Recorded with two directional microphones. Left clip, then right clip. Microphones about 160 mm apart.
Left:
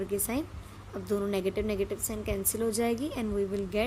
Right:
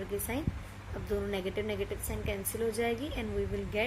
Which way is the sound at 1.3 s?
90° left.